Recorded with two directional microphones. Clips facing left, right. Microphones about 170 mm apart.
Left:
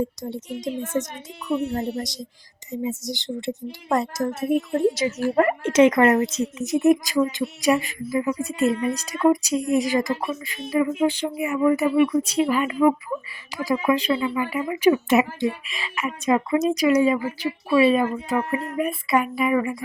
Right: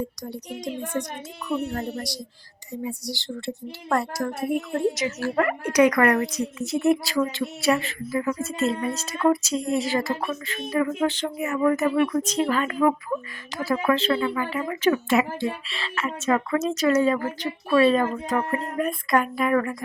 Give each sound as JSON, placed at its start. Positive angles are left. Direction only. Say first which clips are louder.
{"t": 0.2, "sound": "speech", "louder": "left 3 dB", "side_deg": 25}